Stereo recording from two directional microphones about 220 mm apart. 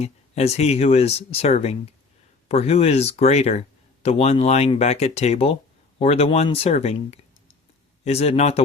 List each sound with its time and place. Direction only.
0.0 s speech: 30° left (ahead or behind)